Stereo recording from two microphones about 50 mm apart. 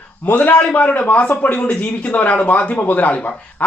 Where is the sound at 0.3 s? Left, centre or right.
Left.